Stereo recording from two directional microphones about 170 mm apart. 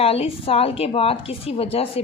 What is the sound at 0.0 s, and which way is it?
A woman's voice, 35° left (ahead or behind).